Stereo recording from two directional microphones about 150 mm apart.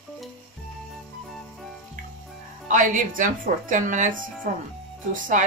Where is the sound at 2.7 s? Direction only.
60° right (ahead or behind).